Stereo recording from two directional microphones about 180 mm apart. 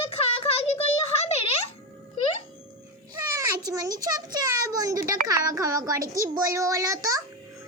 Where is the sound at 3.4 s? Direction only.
20° right (ahead or behind).